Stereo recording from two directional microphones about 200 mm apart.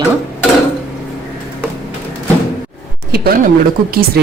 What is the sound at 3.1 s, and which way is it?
Speech, 50° right (ahead or behind).